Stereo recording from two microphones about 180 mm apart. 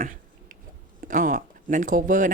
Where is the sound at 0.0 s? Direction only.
50° right (ahead or behind).